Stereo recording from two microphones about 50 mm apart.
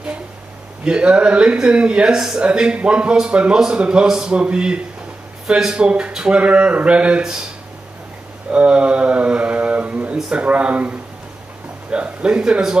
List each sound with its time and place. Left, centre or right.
0.8 s speech: right
8.5 s speech: right